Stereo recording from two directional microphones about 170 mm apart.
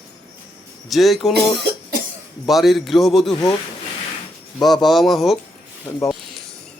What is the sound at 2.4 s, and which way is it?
Speech, centre (ahead or behind).